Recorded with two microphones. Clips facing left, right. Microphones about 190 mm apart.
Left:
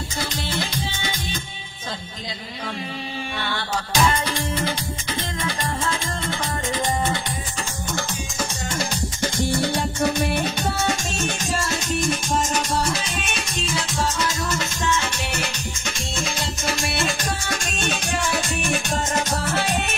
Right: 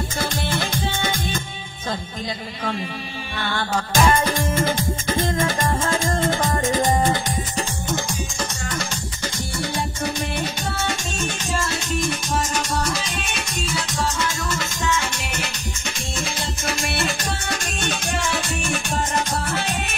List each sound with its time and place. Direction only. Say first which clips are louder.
0.2 s music: right 2 dB; 50° right (ahead or behind)
3.5 s music: right 4 dB; 50° right (ahead or behind)
8.6 s music: left 2 dB; 25° left (ahead or behind)
9.8 s music: left 4 dB; 60° left (ahead or behind)